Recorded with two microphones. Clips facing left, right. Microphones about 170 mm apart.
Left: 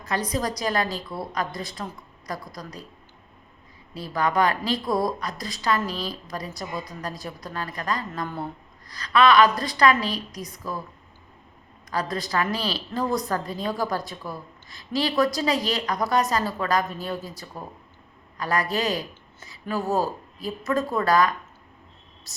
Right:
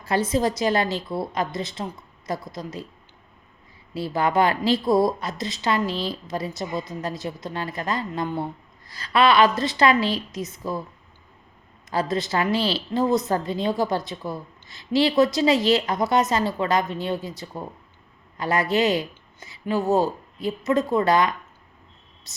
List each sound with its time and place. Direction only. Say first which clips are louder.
0.0 s a woman's voice: right 5 dB; 30° right (ahead or behind)
3.9 s a woman's voice: right 2 dB; 30° right (ahead or behind)
11.9 s a woman's voice: right 4 dB; 25° right (ahead or behind)
19.8 s speech: right 4 dB; centre (ahead or behind)
20.4 s a woman's voice: right 3 dB; 20° right (ahead or behind)